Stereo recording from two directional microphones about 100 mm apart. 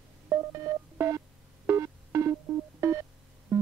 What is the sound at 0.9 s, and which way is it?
Music, 25° right (ahead or behind).